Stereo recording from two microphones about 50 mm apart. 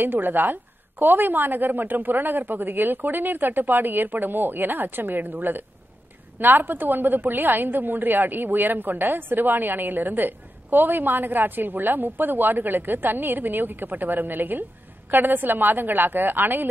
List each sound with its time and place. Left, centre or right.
0.0 s a woman's voice: right